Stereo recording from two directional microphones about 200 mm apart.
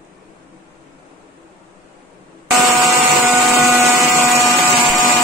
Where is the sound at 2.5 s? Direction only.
5° right (ahead or behind).